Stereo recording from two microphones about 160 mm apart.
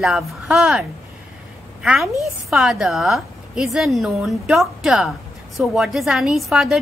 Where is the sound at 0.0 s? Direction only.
Centre (ahead or behind).